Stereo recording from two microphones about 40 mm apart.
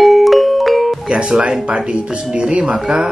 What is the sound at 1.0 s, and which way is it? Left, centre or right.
Speech, right.